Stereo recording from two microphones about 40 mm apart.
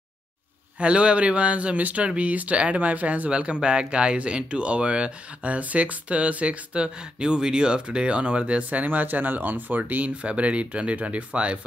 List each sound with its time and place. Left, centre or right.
0.7 s speech: right
3.3 s speech: right
8.6 s speech: right